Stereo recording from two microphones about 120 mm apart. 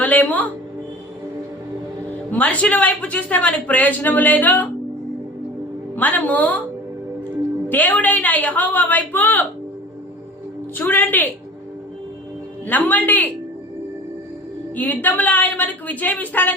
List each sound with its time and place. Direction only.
0.0 s speech: 15° left (ahead or behind)
2.0 s speech: 15° left (ahead or behind)
6.0 s speech: 15° left (ahead or behind)
7.7 s speech: 15° left (ahead or behind)
10.8 s speech: 15° left (ahead or behind)
12.6 s speech: 15° left (ahead or behind)
14.8 s speech: 15° left (ahead or behind)